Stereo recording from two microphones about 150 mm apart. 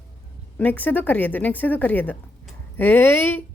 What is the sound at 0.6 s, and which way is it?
Speech, 10° left (ahead or behind).